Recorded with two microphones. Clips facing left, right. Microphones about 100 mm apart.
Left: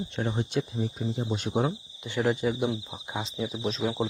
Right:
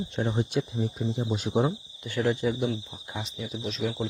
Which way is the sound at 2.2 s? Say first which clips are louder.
Even; 5° left (ahead or behind).